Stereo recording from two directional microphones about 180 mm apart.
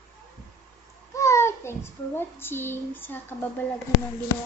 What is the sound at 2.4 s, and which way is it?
A child's voice, 10° left (ahead or behind).